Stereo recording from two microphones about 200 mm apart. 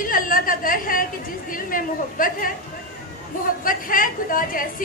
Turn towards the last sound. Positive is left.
turn(degrees=45)  # may be behind; listen again after turning